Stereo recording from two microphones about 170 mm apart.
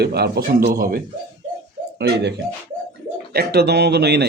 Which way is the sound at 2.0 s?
85° right.